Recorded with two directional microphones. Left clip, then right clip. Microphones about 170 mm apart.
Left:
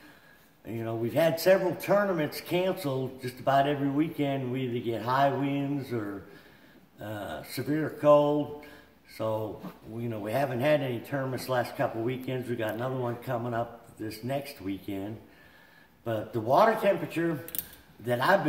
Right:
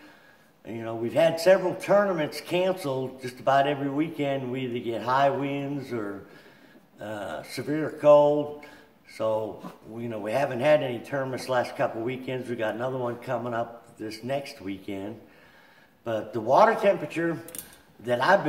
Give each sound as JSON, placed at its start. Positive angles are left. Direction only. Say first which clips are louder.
{"t": 0.7, "sound": "a man's voice", "louder": "right 1 dB", "side_deg": 5}